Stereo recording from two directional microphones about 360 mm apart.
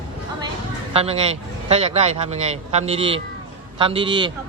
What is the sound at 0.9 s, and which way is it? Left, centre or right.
A man's voice, centre.